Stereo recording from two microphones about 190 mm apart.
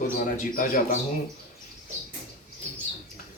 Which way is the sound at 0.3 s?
45° left (ahead or behind).